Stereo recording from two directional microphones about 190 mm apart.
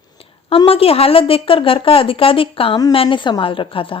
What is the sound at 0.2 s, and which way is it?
A woman's voice, 30° left (ahead or behind).